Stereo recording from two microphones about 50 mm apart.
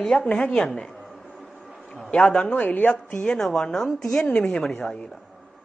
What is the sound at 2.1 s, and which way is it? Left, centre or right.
Speech, left.